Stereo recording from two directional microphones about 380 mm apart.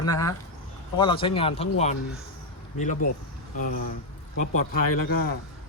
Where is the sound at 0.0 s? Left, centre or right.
Centre.